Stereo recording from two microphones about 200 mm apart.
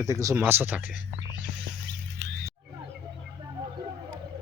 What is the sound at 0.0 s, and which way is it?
Speech, 15° right (ahead or behind).